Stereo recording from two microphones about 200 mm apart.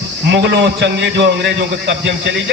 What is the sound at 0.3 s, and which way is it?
A man's voice, 60° right (ahead or behind).